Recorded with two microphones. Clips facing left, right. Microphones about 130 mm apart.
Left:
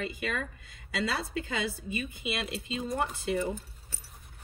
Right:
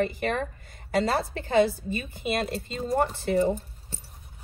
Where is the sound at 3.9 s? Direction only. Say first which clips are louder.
Right 9 dB; 25° right (ahead or behind).